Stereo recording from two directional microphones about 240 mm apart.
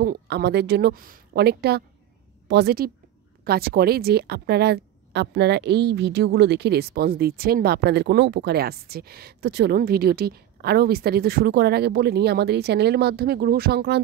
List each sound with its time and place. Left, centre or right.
0.0 s a woman's voice: right